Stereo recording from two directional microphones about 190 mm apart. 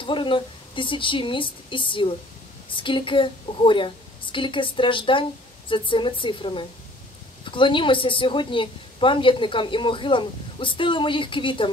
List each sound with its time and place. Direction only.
0.0 s a woman's voice: 25° left (ahead or behind)